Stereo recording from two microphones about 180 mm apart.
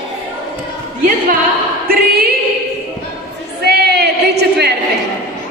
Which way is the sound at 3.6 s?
65° right (ahead or behind).